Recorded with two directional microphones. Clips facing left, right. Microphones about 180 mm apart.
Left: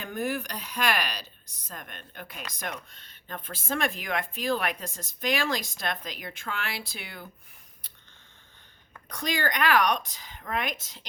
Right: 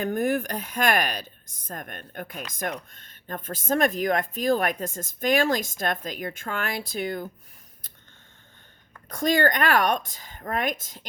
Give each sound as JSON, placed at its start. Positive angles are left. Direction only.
{"t": 0.0, "sound": "speech", "side_deg": -50}
{"t": 9.0, "sound": "speech", "side_deg": -45}